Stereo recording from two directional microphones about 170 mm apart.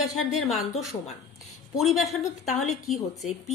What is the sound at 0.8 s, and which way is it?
Speech, 40° left (ahead or behind).